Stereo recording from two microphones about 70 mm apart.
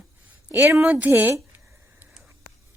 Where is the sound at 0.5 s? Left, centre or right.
Right.